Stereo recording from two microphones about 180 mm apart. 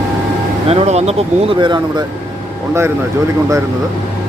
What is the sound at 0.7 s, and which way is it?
Speech, 35° right (ahead or behind).